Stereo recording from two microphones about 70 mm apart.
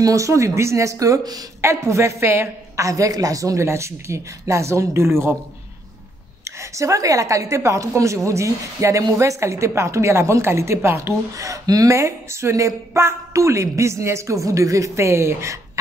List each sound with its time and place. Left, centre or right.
0.0 s a woman's voice: right
2.7 s a woman's voice: right
6.4 s a woman's voice: right